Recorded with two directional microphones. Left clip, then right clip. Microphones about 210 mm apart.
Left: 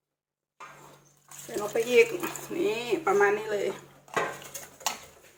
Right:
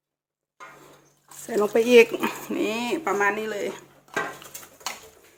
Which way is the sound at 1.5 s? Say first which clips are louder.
Right 7 dB; 55° right (ahead or behind).